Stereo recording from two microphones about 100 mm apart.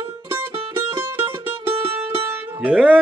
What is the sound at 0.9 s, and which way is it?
Music, 20° right (ahead or behind).